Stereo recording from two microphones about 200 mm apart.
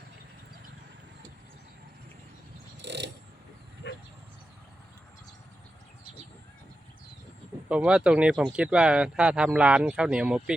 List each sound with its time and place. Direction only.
2.8 s mechanisms: 60° right (ahead or behind)
3.8 s a sound: 60° left (ahead or behind)
7.7 s speech: 5° right (ahead or behind)